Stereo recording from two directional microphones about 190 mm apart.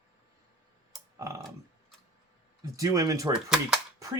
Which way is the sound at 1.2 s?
15° right (ahead or behind).